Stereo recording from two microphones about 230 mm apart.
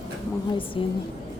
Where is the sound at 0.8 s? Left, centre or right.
Left.